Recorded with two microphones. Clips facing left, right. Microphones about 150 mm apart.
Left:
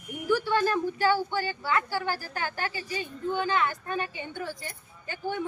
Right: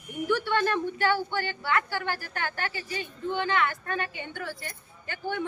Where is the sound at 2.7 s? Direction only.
15° left (ahead or behind).